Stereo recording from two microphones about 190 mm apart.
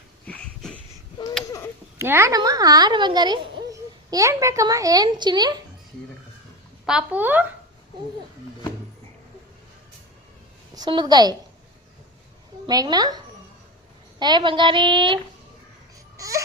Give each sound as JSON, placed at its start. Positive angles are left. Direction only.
{"t": 0.3, "sound": "wheeze", "side_deg": 5}
{"t": 1.5, "sound": "a sound", "side_deg": 15}
{"t": 2.0, "sound": "a woman's voice", "side_deg": -15}
{"t": 6.8, "sound": "speech", "side_deg": -5}
{"t": 10.8, "sound": "a woman's voice", "side_deg": -20}
{"t": 12.6, "sound": "a woman's voice", "side_deg": -20}
{"t": 16.1, "sound": "babbling", "side_deg": -15}